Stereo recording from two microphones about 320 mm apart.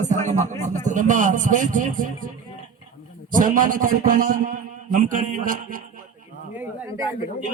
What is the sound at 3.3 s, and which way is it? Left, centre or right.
A man's voice, right.